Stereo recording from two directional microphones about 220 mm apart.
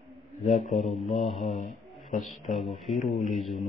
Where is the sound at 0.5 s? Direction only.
35° left (ahead or behind).